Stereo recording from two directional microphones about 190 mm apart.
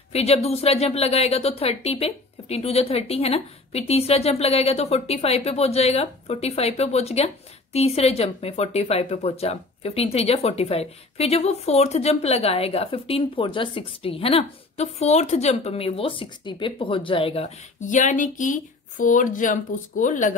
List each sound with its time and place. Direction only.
0.1 s speech: 35° left (ahead or behind)